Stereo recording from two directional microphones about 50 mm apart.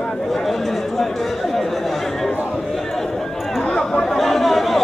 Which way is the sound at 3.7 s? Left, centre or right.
Centre.